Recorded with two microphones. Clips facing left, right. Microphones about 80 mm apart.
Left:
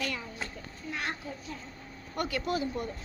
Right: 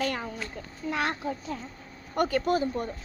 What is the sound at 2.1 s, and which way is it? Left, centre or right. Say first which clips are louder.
Speech: right 6 dB; right.